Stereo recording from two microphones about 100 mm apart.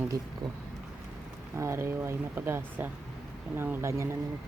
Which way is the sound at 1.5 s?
25° right (ahead or behind).